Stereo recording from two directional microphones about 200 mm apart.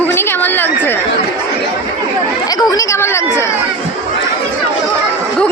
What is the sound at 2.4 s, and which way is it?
Speech, 20° left (ahead or behind).